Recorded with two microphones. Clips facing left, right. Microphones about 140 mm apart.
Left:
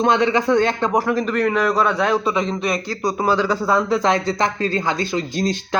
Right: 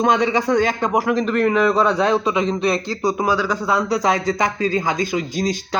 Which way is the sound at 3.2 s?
10° right (ahead or behind).